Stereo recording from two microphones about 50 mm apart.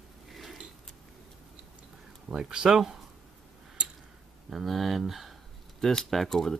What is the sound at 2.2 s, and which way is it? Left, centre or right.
Speech, centre.